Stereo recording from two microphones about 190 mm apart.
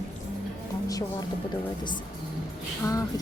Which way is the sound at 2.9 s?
20° left (ahead or behind).